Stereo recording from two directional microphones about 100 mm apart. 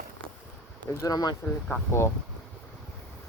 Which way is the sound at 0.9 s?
35° left (ahead or behind).